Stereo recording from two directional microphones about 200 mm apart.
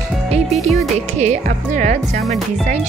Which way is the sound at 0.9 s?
35° right (ahead or behind).